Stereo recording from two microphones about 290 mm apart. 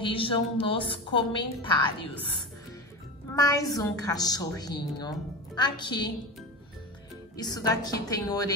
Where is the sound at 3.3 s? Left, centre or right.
Centre.